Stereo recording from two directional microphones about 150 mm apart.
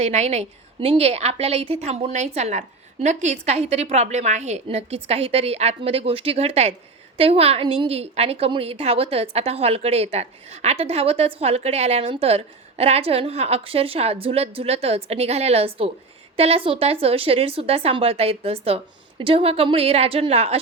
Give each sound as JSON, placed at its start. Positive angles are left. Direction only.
{"t": 0.0, "sound": "a woman's voice", "side_deg": -50}